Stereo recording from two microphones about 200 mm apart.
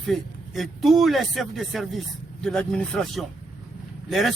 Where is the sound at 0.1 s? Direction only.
Centre (ahead or behind).